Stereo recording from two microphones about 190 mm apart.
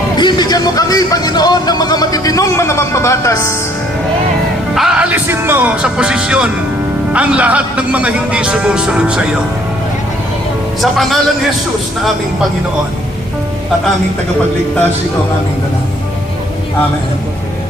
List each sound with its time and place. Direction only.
0.2 s a sound: 25° left (ahead or behind)
4.7 s music: centre (ahead or behind)
7.1 s a man's voice: 5° right (ahead or behind)
10.8 s a man's voice: centre (ahead or behind)